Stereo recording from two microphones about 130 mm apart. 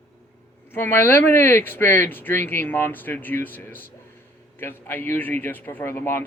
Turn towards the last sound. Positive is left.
turn(degrees=15)  # may be behind; listen again after turning